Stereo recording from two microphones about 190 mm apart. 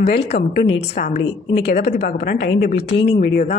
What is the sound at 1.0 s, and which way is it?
Speech, 50° left (ahead or behind).